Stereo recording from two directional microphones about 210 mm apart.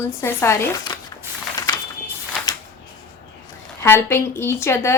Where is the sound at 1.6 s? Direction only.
15° left (ahead or behind).